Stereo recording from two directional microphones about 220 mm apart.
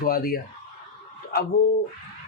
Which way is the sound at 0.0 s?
40° left (ahead or behind).